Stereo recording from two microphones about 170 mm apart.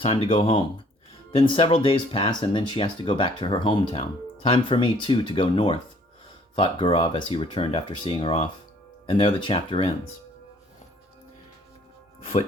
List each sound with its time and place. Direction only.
0.0 s speech: 35° left (ahead or behind)
12.2 s speech: 35° left (ahead or behind)